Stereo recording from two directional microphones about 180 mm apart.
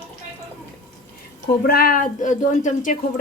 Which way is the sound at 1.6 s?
55° left (ahead or behind).